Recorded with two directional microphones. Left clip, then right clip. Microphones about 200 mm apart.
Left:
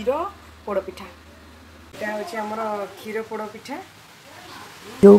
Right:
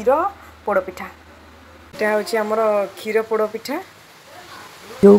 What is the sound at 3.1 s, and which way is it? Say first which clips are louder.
Speech: right 11 dB; 50° right (ahead or behind).